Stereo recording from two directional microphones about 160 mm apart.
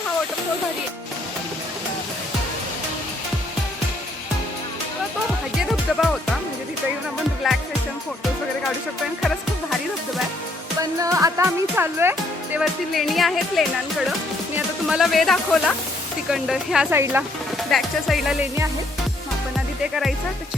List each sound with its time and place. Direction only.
5.6 s music: centre (ahead or behind)
7.4 s music: centre (ahead or behind)
10.8 s speech: 20° right (ahead or behind)
12.5 s speech: centre (ahead or behind)
17.7 s speech: centre (ahead or behind)
19.5 s music: 5° right (ahead or behind)